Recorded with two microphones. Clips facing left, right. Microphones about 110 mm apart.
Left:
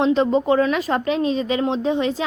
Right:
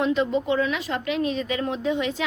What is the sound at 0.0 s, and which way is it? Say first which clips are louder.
A woman's voice: left 5 dB; 35° left (ahead or behind).